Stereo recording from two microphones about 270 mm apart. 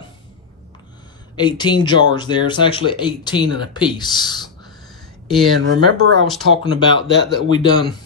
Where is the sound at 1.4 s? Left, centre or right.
Centre.